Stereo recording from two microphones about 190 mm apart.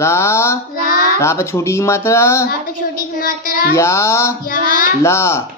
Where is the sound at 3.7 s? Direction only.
15° left (ahead or behind).